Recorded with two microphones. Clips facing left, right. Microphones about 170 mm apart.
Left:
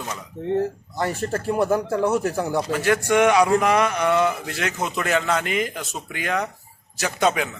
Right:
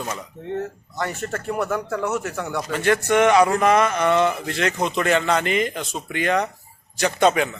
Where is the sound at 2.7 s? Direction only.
5° left (ahead or behind).